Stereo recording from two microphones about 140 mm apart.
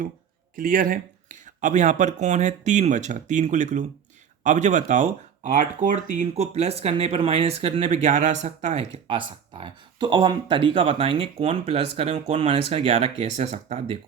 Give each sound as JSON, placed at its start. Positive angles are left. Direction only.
{"t": 0.5, "sound": "speech", "side_deg": -75}